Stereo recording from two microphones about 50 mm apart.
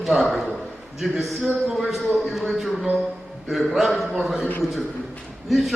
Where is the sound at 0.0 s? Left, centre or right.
Centre.